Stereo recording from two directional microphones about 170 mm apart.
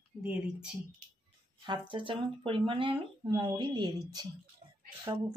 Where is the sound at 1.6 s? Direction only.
30° right (ahead or behind).